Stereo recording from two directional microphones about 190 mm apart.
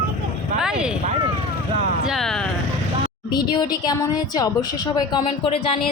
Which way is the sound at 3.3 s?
20° left (ahead or behind).